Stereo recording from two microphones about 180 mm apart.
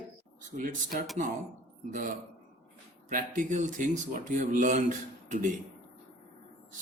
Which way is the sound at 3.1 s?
45° right (ahead or behind).